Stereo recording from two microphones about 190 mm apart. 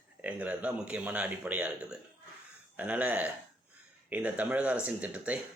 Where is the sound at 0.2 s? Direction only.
10° right (ahead or behind).